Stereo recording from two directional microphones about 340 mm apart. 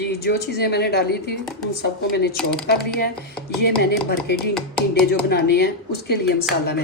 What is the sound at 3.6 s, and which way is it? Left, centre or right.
A woman's voice, left.